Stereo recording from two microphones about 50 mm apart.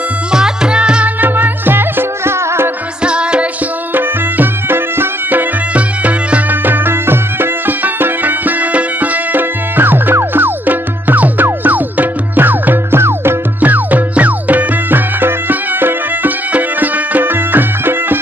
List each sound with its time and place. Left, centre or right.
0.3 s music: centre
1.2 s music: right
3.0 s music: right
3.9 s music: right
5.8 s music: right
6.5 s music: right
13.0 s music: right
13.6 s music: right